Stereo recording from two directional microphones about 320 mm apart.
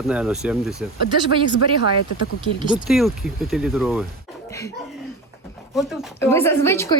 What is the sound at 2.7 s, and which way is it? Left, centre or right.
Speech, centre.